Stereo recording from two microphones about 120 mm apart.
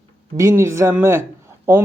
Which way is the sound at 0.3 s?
25° right (ahead or behind).